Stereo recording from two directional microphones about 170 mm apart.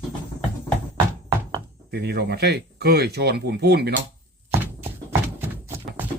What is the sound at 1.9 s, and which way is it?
Speech, 70° right (ahead or behind).